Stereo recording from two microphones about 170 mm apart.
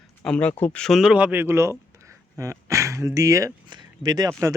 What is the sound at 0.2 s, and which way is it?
Speech, 10° left (ahead or behind).